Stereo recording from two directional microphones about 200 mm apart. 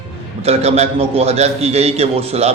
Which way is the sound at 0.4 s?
30° right (ahead or behind).